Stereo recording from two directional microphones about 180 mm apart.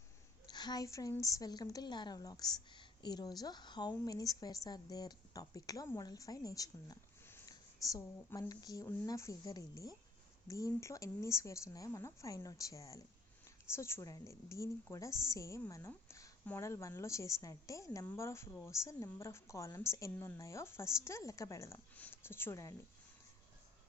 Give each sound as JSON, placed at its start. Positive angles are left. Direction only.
{"t": 0.4, "sound": "a woman's voice", "side_deg": 25}